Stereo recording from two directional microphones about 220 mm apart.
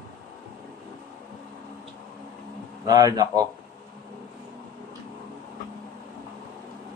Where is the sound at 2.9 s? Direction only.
15° right (ahead or behind).